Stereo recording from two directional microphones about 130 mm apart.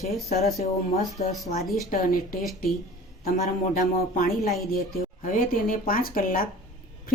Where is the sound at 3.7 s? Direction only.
90° left.